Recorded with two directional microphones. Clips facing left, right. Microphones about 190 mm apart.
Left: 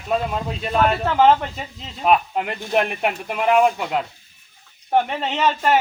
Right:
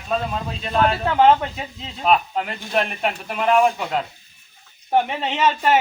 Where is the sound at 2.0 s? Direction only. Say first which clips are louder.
Left 1 dB; 10° left (ahead or behind).